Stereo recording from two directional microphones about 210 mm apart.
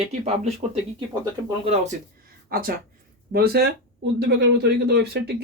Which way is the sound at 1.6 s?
35° right (ahead or behind).